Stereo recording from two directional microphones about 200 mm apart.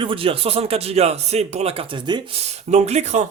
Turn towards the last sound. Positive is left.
turn(degrees=-35)  # may be behind; listen again after turning